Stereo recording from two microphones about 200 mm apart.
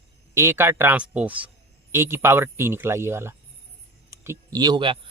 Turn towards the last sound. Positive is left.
turn(degrees=-25)  # may be behind; listen again after turning